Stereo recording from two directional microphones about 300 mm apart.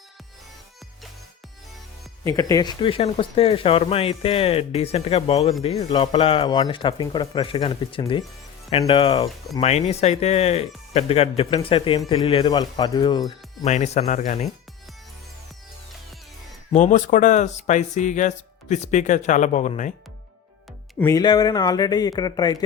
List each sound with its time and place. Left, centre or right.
2.2 s speech: centre
16.7 s speech: left
21.0 s speech: centre